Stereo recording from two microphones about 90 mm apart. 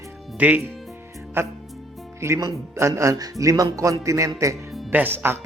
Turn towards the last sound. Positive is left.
turn(degrees=-25)  # may be behind; listen again after turning